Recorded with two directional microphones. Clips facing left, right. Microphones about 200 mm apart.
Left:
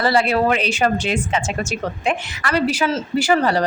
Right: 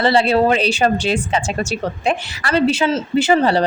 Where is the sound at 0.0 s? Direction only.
25° right (ahead or behind).